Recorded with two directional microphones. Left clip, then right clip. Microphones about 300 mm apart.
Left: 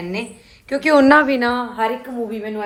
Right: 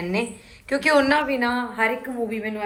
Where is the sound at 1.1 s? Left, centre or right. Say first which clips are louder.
Left 7 dB; left; by 2.5 s centre.